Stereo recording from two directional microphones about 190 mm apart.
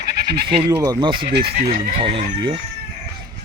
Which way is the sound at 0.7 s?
20° right (ahead or behind).